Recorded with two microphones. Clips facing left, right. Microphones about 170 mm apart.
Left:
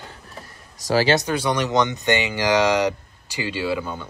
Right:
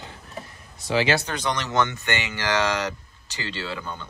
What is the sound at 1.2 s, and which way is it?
Speech, 10° left (ahead or behind).